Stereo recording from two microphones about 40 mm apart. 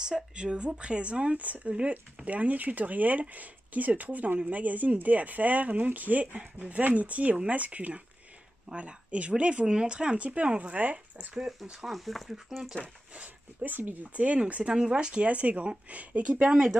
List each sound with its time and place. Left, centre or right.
0.0 s speech: right
2.2 s speech: right
11.7 s speech: centre
13.1 s dog: right
13.7 s speech: right
14.1 s speech: right
15.2 s speech: right
16.4 s speech: right